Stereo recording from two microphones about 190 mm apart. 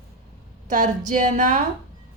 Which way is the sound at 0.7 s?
40° right (ahead or behind).